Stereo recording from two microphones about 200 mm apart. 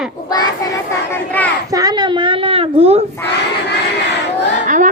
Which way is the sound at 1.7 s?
20° right (ahead or behind).